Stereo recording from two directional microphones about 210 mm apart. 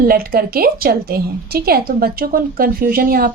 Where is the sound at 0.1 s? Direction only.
45° right (ahead or behind).